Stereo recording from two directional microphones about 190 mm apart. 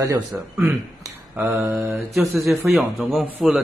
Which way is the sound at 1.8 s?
Centre (ahead or behind).